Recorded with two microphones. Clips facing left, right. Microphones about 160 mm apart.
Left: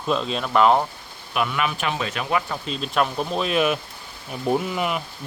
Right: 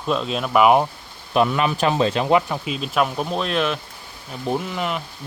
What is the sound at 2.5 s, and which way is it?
Speech, 5° right (ahead or behind).